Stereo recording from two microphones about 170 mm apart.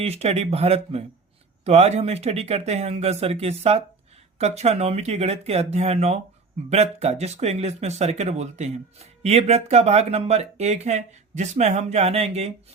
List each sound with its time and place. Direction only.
0.0 s speech: 35° right (ahead or behind)